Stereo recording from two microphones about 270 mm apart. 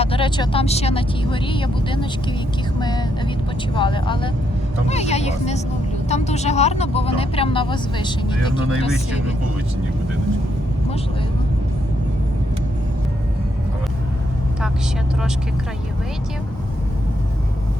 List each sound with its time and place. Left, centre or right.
0.0 s speech: centre
3.8 s speech: centre